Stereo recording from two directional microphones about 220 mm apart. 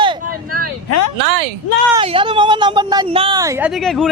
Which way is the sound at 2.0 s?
25° right (ahead or behind).